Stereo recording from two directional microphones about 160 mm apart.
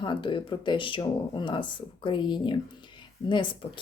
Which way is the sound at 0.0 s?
30° left (ahead or behind).